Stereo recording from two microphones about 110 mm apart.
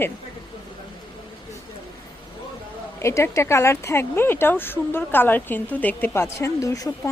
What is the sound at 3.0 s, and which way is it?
Speech, 25° left (ahead or behind).